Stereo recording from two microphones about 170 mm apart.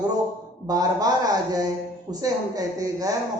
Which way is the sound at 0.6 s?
20° right (ahead or behind).